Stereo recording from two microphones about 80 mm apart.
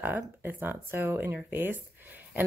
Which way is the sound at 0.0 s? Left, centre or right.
Right.